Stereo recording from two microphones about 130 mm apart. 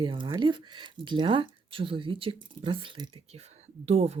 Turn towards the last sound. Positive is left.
turn(degrees=-55)  # may be behind; listen again after turning